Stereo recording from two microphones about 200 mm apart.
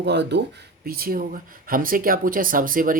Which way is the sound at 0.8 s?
50° right (ahead or behind).